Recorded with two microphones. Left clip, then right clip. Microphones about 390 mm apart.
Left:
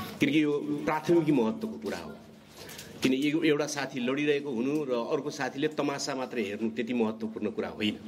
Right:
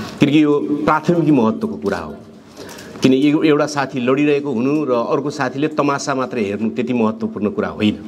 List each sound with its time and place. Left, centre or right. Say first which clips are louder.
0.2 s a man's voice: right 13 dB; right